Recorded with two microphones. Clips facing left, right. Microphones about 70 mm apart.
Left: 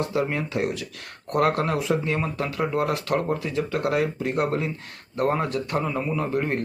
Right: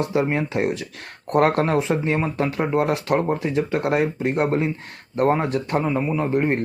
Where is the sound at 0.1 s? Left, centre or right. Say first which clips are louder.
Right 4 dB; right.